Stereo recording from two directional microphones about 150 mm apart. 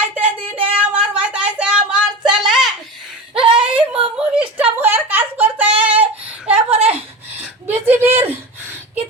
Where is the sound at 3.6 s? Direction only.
10° right (ahead or behind).